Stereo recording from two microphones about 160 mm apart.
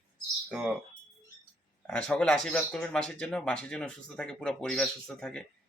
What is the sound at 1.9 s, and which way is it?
Speech, 5° left (ahead or behind).